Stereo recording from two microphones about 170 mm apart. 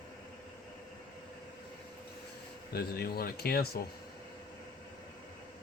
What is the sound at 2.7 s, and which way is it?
Speech, 65° left (ahead or behind).